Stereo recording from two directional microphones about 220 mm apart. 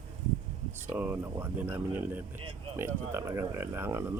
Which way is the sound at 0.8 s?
10° right (ahead or behind).